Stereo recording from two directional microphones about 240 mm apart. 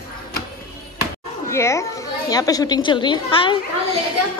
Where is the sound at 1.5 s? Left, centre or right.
Centre.